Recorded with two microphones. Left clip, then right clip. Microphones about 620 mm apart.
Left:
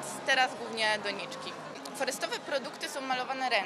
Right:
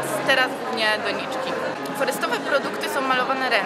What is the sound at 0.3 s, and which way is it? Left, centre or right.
A woman's voice, left.